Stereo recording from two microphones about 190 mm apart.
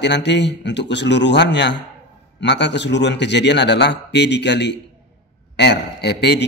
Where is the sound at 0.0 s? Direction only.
65° left (ahead or behind).